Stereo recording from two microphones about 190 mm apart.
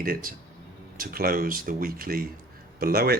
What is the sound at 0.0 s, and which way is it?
Speech, 50° right (ahead or behind).